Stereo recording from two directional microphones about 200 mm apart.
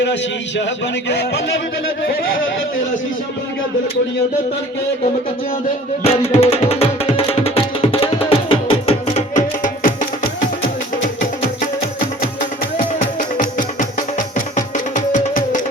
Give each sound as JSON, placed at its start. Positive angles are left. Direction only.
{"t": 0.0, "sound": "a man's voice", "side_deg": 60}
{"t": 6.0, "sound": "music", "side_deg": 30}
{"t": 12.7, "sound": "music", "side_deg": 40}